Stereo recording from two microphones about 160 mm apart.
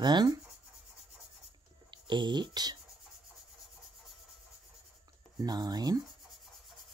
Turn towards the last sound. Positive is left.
turn(degrees=-25)  # may be behind; listen again after turning